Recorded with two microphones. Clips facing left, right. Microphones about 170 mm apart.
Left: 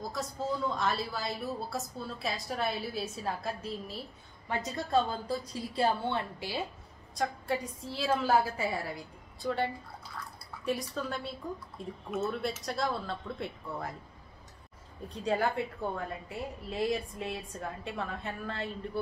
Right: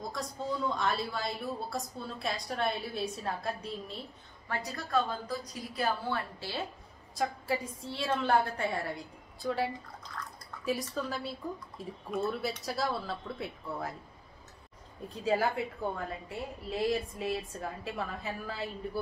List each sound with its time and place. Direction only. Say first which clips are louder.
0.0 s speech: left 2 dB; centre (ahead or behind)
4.5 s a woman's voice: left 3 dB; 20° left (ahead or behind)
7.2 s a woman's voice: even; centre (ahead or behind)
15.0 s speech: right 1 dB; centre (ahead or behind)